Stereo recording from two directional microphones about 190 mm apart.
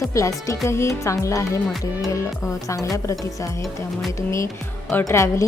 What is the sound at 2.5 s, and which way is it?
Speech, 15° left (ahead or behind).